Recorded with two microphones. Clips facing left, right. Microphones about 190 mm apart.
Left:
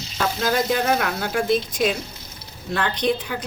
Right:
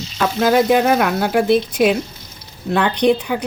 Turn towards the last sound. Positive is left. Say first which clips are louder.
# right 7 dB
turn(degrees=-65)  # may be behind; listen again after turning